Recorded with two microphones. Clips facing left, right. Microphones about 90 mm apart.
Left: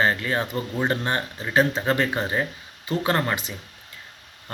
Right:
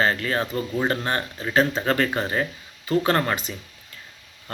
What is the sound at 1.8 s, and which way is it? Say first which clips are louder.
Speech: even; 20° left (ahead or behind).